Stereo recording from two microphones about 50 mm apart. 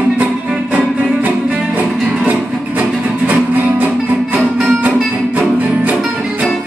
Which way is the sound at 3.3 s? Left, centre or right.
Right.